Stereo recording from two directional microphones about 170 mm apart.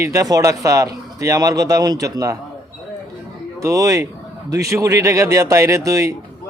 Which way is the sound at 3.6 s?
20° right (ahead or behind).